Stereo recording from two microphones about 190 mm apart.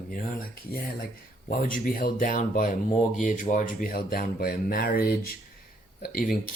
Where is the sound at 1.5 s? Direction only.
50° left (ahead or behind).